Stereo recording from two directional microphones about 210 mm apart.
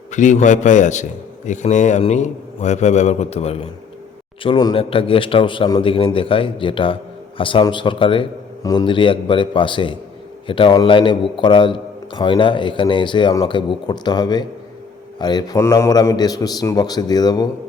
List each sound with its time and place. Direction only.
0.1 s a man's voice: 35° left (ahead or behind); by 17.5 s 20° left (ahead or behind)